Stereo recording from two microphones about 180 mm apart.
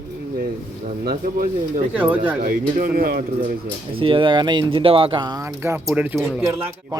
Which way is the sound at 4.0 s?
30° right (ahead or behind).